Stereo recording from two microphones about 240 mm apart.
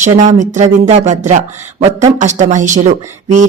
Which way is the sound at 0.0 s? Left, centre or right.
Right.